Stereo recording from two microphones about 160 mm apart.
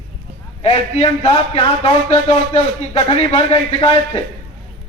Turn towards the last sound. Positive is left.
turn(degrees=35)  # may be behind; listen again after turning